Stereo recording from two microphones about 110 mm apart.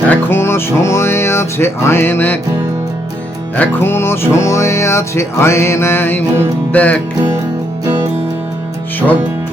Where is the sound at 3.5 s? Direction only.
20° left (ahead or behind).